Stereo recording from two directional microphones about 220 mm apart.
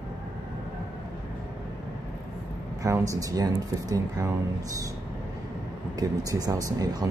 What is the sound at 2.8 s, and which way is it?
Speech, 15° right (ahead or behind).